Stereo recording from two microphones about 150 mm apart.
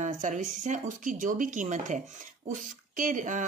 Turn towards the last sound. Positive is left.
turn(degrees=-55)  # may be behind; listen again after turning